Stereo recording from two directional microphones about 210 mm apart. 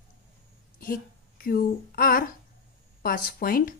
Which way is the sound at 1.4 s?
45° left (ahead or behind).